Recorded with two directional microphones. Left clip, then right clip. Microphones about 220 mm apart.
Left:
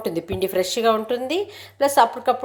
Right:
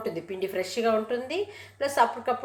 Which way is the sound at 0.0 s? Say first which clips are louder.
Left 7 dB; 35° left (ahead or behind).